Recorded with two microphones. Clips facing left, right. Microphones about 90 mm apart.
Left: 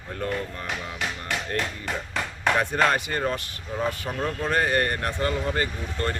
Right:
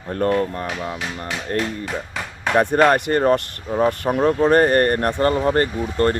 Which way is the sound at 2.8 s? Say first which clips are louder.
Right 8 dB; 55° right (ahead or behind).